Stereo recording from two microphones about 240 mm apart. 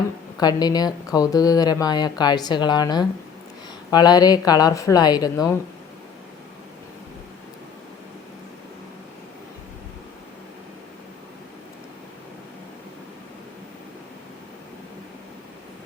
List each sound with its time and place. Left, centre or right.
0.3 s speech: centre